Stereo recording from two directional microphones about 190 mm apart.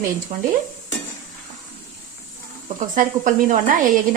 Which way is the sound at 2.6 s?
40° right (ahead or behind).